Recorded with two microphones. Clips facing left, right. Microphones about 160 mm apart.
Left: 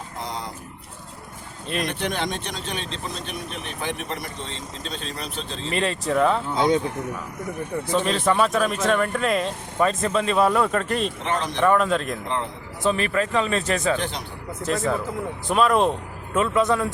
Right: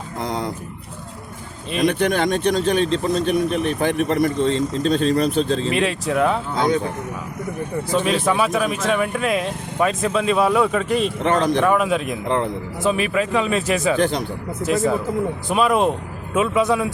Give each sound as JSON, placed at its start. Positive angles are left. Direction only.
{"t": 0.2, "sound": "a sound", "side_deg": -50}
{"t": 1.9, "sound": "speech", "side_deg": -50}
{"t": 5.6, "sound": "speech", "side_deg": -5}
{"t": 7.9, "sound": "speech", "side_deg": -5}
{"t": 11.2, "sound": "speech", "side_deg": -45}
{"t": 11.6, "sound": "speech", "side_deg": -5}
{"t": 14.0, "sound": "speech", "side_deg": -45}
{"t": 14.6, "sound": "speech", "side_deg": -5}